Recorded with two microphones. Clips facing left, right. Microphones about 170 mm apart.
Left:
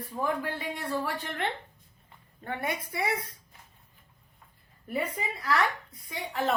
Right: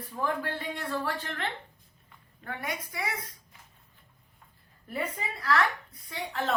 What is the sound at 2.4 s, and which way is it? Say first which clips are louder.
Speech: left 3 dB; 25° left (ahead or behind).